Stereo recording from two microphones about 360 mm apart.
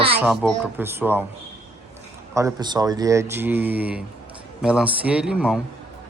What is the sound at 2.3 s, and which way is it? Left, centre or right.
Speech, centre.